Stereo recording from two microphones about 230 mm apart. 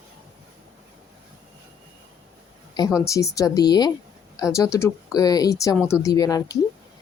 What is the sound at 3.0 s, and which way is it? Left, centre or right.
Speech, centre.